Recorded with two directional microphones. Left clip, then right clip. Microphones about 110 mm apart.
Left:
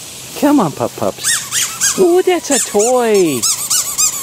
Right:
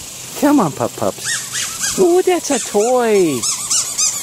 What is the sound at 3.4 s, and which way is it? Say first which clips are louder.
Squeak: left 2 dB; 35° left (ahead or behind).